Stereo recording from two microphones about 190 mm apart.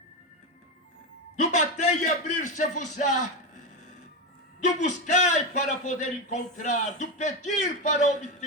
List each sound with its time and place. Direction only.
1.4 s a man's voice: 40° left (ahead or behind)
4.6 s a man's voice: 40° left (ahead or behind)